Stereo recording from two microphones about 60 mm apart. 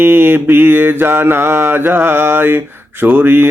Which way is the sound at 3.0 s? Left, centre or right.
Right.